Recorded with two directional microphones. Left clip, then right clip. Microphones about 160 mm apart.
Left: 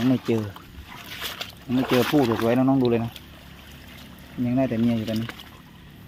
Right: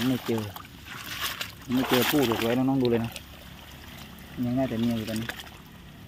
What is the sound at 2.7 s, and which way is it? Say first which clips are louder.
Speech: left 3 dB; 20° left (ahead or behind).